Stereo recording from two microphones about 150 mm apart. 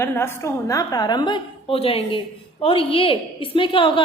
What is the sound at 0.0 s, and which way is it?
A woman's voice, 15° left (ahead or behind).